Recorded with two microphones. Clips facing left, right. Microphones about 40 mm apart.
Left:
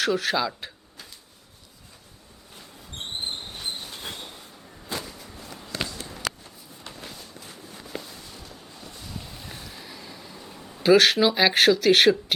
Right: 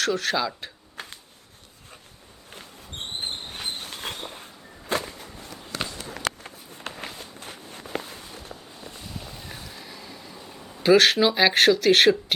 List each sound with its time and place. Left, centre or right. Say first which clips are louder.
0.0 s speech: left 1 dB; centre
3.5 s train: right 1 dB; right
4.9 s a sound: right 6 dB; right
5.9 s run: right 2 dB; right
6.4 s walk: right 5 dB; right
7.9 s walk: right 5 dB; right
8.8 s boat: right 2 dB; right
9.0 s a sound: even; centre